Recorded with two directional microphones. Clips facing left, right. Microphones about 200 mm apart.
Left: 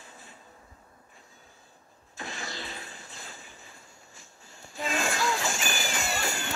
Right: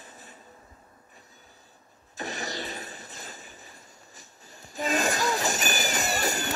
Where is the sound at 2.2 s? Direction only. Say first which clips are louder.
Right 5 dB; 40° right (ahead or behind).